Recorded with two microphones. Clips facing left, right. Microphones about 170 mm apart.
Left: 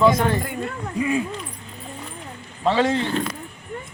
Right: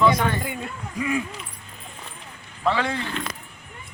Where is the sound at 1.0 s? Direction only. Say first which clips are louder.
Left 3 dB; 25° left (ahead or behind).